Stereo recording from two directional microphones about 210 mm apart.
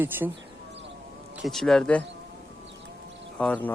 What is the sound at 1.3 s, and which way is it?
Speech, centre (ahead or behind).